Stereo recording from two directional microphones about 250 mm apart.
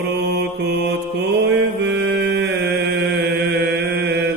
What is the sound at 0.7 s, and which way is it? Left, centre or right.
Mantra, right.